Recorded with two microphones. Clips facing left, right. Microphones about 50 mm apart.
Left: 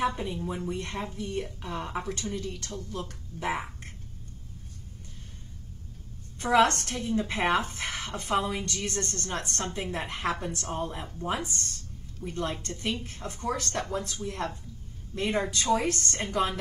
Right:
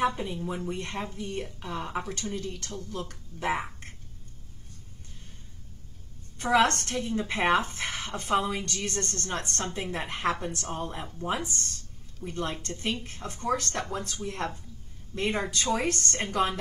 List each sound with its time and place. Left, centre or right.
0.1 s speech: centre
6.8 s speech: centre
10.3 s a woman's voice: centre
16.2 s speech: centre